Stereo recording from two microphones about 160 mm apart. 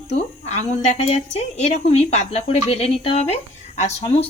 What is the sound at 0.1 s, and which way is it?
A woman's voice, 45° left (ahead or behind).